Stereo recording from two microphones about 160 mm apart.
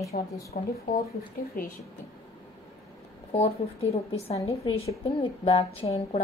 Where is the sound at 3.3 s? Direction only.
40° left (ahead or behind).